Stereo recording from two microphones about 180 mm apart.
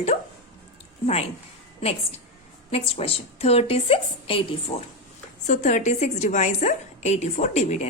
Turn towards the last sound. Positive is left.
turn(degrees=40)  # may be behind; listen again after turning